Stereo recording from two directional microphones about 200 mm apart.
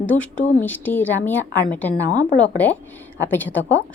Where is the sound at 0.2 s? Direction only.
10° left (ahead or behind).